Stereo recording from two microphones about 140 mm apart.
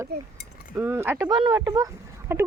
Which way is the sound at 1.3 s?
30° right (ahead or behind).